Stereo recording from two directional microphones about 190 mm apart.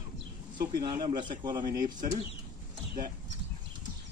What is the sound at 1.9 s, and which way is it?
Speech, 40° right (ahead or behind).